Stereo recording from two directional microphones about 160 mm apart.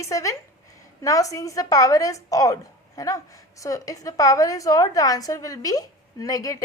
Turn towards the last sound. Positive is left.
turn(degrees=20)  # may be behind; listen again after turning